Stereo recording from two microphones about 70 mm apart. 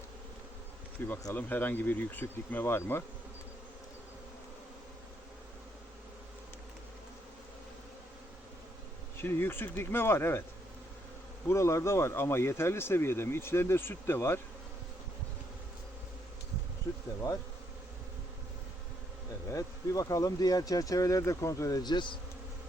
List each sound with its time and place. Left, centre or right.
0.9 s speech: left
9.1 s speech: left
11.4 s speech: left
19.5 s speech: left
21.8 s speech: left